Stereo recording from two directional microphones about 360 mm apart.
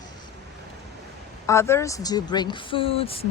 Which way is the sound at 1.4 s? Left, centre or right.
Centre.